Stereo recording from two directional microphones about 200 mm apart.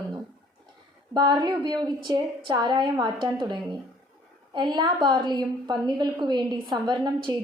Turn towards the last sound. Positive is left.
turn(degrees=-20)  # may be behind; listen again after turning